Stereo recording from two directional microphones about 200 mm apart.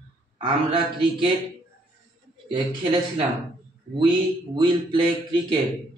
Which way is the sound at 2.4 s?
25° right (ahead or behind).